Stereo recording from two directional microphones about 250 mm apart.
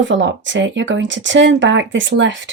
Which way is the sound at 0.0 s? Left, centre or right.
Right.